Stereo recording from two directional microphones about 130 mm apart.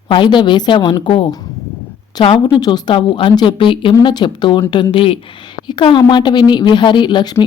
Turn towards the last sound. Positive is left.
turn(degrees=35)  # may be behind; listen again after turning